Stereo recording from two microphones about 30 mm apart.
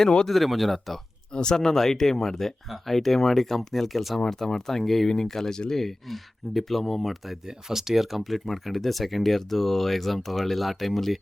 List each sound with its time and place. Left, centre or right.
0.3 s speech: centre
1.3 s speech: left; by 4.2 s centre
4.2 s speech: left
4.8 s speech: centre
5.0 s speech: centre
7.4 s speech: centre
8.4 s speech: centre